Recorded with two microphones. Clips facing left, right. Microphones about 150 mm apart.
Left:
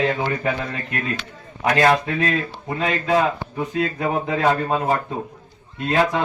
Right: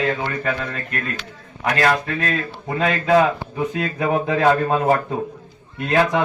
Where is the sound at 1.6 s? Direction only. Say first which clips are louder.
Left 2 dB; 25° left (ahead or behind).